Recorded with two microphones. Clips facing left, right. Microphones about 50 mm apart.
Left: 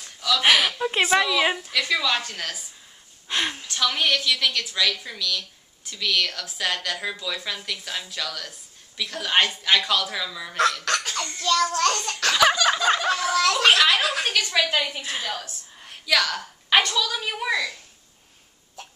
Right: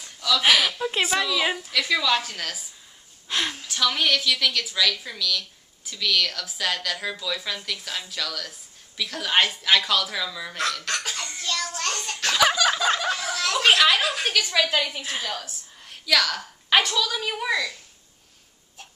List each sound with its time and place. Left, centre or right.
0.0 s a woman's voice: centre
3.3 s gasp: centre
3.6 s a woman's voice: centre
11.1 s a sound: centre
11.7 s a child's voice: left
12.3 s a sound: centre
13.8 s a woman's voice: centre
15.8 s a sound: centre
16.9 s a woman's voice: centre